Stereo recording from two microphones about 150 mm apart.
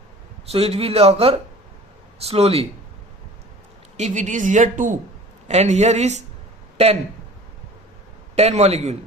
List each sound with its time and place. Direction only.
0.4 s speech: 45° right (ahead or behind)
3.9 s a woman's voice: 50° right (ahead or behind)
8.4 s speech: 45° right (ahead or behind)